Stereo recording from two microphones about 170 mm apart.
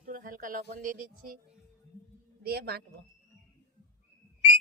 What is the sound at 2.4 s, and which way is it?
Speech, 70° right (ahead or behind).